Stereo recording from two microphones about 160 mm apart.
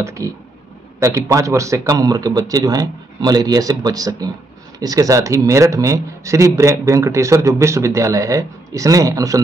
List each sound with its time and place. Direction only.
0.0 s speech: 20° right (ahead or behind)